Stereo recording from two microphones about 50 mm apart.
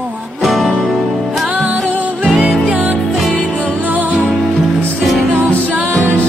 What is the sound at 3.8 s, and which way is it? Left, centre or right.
Music, right.